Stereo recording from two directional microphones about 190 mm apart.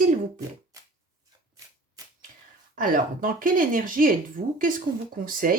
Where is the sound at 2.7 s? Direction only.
45° right (ahead or behind).